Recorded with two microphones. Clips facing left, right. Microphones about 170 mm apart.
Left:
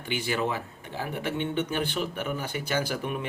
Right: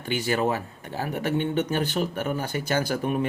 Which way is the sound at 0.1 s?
45° right (ahead or behind).